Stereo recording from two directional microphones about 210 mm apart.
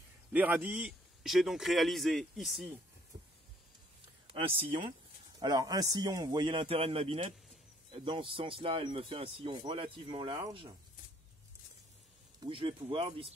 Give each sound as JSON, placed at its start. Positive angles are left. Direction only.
{"t": 0.3, "sound": "a man's voice", "side_deg": -10}
{"t": 4.3, "sound": "speech", "side_deg": -25}
{"t": 12.4, "sound": "speech", "side_deg": -25}